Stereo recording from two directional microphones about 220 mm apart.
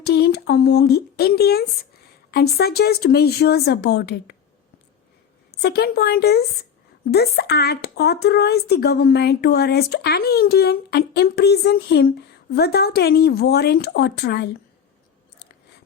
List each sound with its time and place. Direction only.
0.0 s a woman's voice: 50° left (ahead or behind)
5.5 s a woman's voice: 45° left (ahead or behind)